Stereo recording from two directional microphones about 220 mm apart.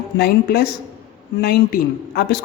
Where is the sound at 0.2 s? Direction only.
45° left (ahead or behind).